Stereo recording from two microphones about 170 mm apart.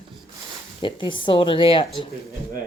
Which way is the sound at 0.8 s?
30° left (ahead or behind).